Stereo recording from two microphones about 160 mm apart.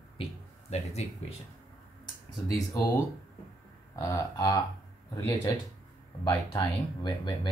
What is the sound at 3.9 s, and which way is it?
Speech, 20° left (ahead or behind).